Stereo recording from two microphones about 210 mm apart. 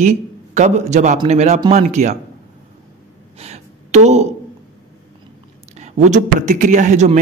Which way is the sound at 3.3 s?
30° right (ahead or behind).